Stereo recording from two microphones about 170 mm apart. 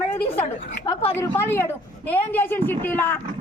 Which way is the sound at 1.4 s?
15° left (ahead or behind).